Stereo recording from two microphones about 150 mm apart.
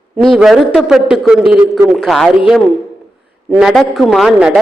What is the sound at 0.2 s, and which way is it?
A man's voice, centre (ahead or behind).